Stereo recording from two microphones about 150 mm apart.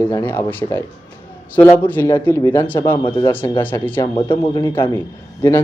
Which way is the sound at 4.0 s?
30° left (ahead or behind).